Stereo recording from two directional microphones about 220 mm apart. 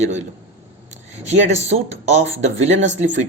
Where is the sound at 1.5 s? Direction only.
30° right (ahead or behind).